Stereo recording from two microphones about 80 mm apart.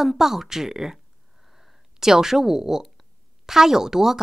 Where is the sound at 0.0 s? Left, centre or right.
Centre.